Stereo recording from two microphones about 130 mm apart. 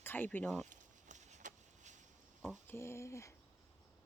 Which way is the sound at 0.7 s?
70° right (ahead or behind).